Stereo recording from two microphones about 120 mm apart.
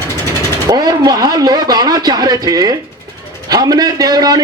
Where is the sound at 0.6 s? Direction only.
30° right (ahead or behind).